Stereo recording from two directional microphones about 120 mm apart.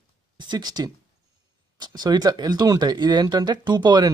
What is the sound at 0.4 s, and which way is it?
Speech, 35° right (ahead or behind).